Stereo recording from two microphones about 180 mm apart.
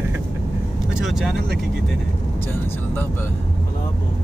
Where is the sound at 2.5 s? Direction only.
10° left (ahead or behind).